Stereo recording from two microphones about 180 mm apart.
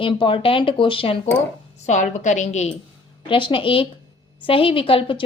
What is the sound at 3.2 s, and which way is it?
A woman's voice, 30° left (ahead or behind).